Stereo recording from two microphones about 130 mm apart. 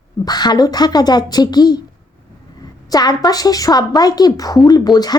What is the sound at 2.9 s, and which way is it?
A woman's voice, 30° left (ahead or behind).